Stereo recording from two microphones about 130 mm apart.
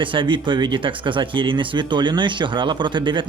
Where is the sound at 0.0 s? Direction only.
40° right (ahead or behind).